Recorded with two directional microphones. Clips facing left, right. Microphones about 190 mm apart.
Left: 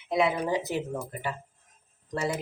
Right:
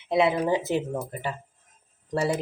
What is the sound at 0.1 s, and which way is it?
Speech, 25° right (ahead or behind).